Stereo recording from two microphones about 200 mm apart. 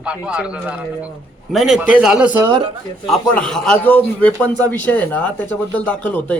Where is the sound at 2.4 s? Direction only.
25° right (ahead or behind).